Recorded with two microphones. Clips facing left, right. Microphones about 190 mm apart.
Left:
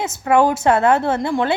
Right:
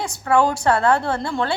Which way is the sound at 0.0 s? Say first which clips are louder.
Left 3 dB; 20° left (ahead or behind).